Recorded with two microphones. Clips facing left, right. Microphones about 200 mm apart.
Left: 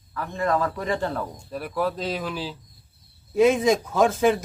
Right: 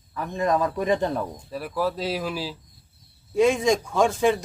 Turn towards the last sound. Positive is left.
turn(degrees=5)  # may be behind; listen again after turning